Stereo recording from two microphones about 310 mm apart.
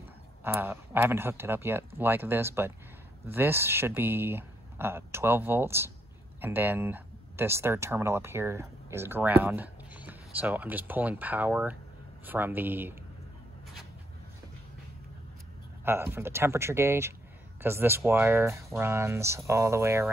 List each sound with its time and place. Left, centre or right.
0.4 s speech: centre
15.8 s speech: centre